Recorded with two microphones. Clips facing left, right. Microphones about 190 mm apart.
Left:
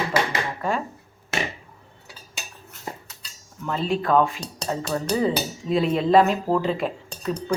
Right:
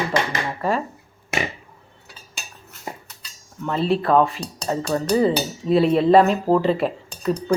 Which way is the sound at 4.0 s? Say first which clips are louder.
Right 2 dB; centre (ahead or behind).